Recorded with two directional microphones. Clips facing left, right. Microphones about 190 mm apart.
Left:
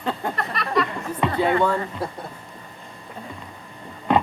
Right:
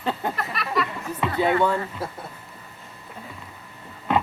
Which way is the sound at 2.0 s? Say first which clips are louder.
Left 3 dB; centre (ahead or behind).